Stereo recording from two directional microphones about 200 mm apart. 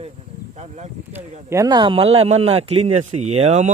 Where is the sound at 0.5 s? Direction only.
35° right (ahead or behind).